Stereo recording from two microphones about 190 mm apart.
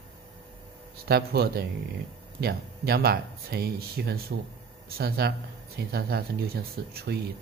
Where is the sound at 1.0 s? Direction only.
55° right (ahead or behind).